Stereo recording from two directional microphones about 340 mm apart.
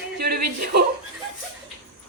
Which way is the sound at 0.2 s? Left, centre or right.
Right.